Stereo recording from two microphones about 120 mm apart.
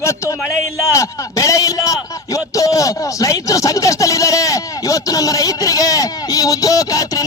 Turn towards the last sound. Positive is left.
turn(degrees=30)  # may be behind; listen again after turning